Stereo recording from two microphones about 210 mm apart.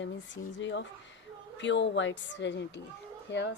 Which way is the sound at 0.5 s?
60° left (ahead or behind).